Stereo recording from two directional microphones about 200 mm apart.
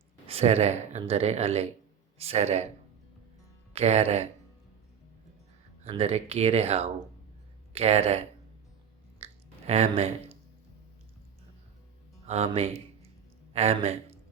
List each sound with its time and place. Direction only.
0.3 s speech: 30° right (ahead or behind)
3.7 s speech: 30° right (ahead or behind)
5.8 s speech: 30° right (ahead or behind)
9.2 s a sound: 30° right (ahead or behind)
12.2 s speech: 30° right (ahead or behind)